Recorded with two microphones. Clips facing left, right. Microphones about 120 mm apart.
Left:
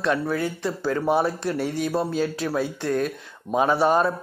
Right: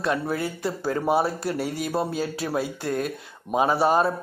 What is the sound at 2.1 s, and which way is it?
Speech, 40° right (ahead or behind).